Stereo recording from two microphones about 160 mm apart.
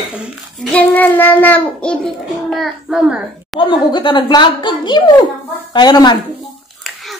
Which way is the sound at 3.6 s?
30° left (ahead or behind).